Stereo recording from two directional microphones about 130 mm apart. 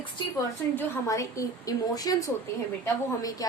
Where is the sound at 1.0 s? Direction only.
25° left (ahead or behind).